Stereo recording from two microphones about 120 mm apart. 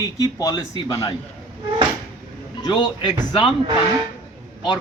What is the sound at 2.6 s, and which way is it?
Speech, 35° left (ahead or behind).